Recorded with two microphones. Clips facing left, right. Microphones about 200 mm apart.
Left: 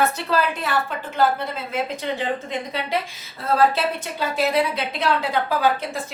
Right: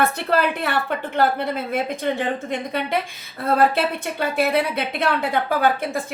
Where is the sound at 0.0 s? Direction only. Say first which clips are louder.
Right 1 dB; 55° right (ahead or behind).